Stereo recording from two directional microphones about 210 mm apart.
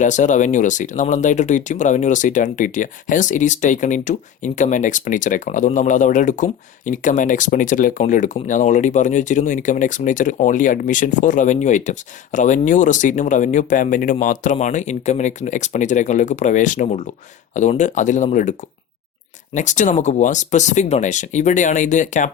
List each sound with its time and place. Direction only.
0.0 s speech: 35° left (ahead or behind)
19.5 s speech: 35° left (ahead or behind)